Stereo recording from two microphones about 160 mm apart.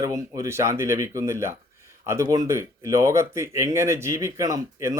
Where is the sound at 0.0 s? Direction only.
20° right (ahead or behind).